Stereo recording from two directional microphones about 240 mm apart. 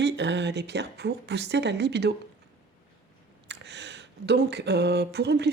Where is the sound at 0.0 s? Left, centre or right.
Right.